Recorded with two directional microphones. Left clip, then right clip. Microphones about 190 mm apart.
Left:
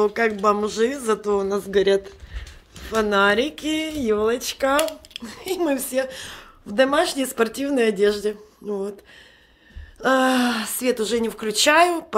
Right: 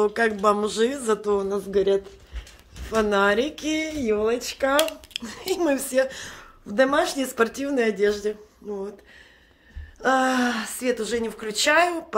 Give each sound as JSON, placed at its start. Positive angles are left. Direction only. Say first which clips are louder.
{"t": 0.0, "sound": "a woman's voice", "louder": "left 1 dB", "side_deg": 10}
{"t": 2.8, "sound": "a woman's voice", "louder": "left 2 dB", "side_deg": 0}
{"t": 5.1, "sound": "a woman's voice", "louder": "even", "side_deg": 0}
{"t": 8.6, "sound": "speech", "louder": "left 5 dB", "side_deg": 45}
{"t": 9.9, "sound": "a woman's voice", "louder": "left 2 dB", "side_deg": 30}